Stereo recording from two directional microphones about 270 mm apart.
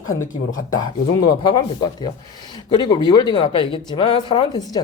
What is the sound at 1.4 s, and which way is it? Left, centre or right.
Speech, centre.